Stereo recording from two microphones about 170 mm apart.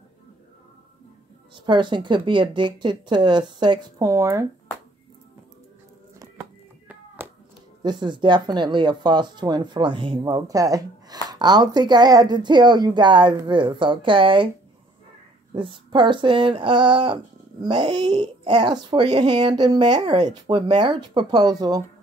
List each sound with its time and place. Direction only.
1.5 s speech: 30° right (ahead or behind)
6.1 s music: 15° right (ahead or behind)
7.2 s a sound: 15° right (ahead or behind)
7.8 s speech: 25° right (ahead or behind)
15.5 s speech: 30° right (ahead or behind)